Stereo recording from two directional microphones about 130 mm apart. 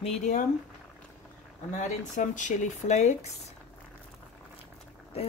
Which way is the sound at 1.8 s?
70° left (ahead or behind).